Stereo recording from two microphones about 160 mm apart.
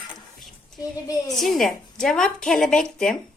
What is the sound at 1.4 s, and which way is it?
Speech, centre (ahead or behind).